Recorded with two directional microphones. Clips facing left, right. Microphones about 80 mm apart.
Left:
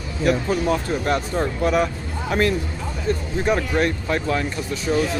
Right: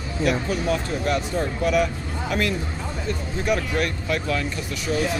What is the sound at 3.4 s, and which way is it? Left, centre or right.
Speech, left.